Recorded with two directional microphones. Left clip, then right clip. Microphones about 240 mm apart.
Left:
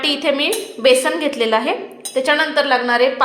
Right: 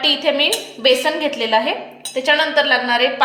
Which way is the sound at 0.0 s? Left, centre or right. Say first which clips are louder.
Right 2 dB; centre.